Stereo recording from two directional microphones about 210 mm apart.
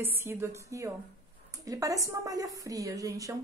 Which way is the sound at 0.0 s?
10° right (ahead or behind).